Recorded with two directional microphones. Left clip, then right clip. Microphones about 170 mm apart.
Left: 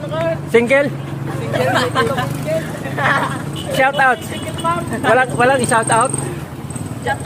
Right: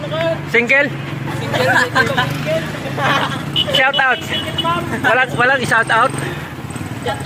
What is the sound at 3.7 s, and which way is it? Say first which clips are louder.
Speech: left 1 dB; 20° left (ahead or behind).